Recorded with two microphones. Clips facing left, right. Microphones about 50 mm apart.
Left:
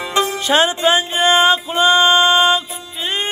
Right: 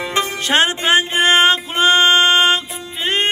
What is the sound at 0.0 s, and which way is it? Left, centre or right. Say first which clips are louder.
Music: left 2 dB; right.